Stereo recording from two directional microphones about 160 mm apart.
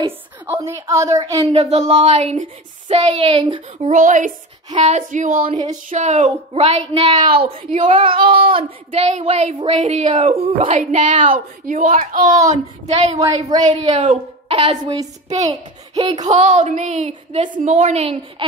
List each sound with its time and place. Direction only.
0.5 s a man's voice: 20° right (ahead or behind)
1.5 s speech: 45° right (ahead or behind)
2.9 s speech: 35° right (ahead or behind)
3.7 s speech: 50° right (ahead or behind)
5.5 s speech: 25° right (ahead or behind)
5.9 s speech: 50° right (ahead or behind)
8.0 s speech: 30° right (ahead or behind); by 10.1 s 50° right (ahead or behind)
10.1 s speech: 35° right (ahead or behind)
13.5 s speech: 25° right (ahead or behind)
13.8 s speech: 50° right (ahead or behind)
14.5 s speech: 35° right (ahead or behind)
15.2 s a child's voice: 45° right (ahead or behind)
16.3 s speech: 50° right (ahead or behind)